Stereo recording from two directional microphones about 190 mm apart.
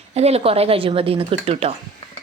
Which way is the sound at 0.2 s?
30° right (ahead or behind).